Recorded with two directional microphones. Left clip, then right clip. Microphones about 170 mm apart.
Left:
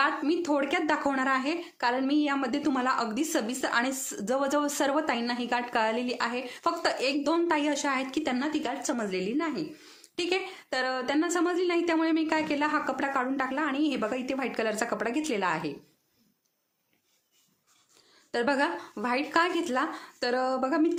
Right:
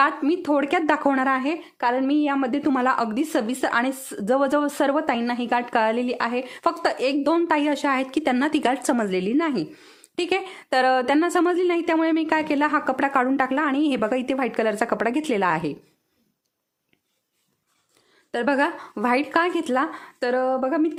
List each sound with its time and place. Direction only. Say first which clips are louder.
0.0 s a woman's voice: right 6 dB; 40° right (ahead or behind)
18.3 s a woman's voice: right 5 dB; 35° right (ahead or behind)